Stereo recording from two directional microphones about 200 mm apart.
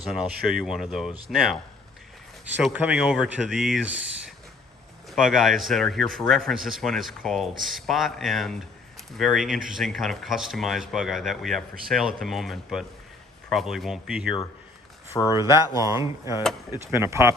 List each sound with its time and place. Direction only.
0.1 s speech: centre (ahead or behind)
2.6 s speech: 5° right (ahead or behind)
5.1 s speech: centre (ahead or behind)
15.1 s speech: 20° left (ahead or behind)
15.4 s speech: 15° right (ahead or behind)